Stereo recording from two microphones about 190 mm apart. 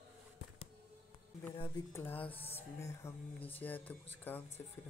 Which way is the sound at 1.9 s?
10° left (ahead or behind).